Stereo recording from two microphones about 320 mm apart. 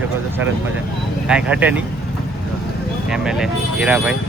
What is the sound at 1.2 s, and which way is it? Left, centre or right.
Speech, centre.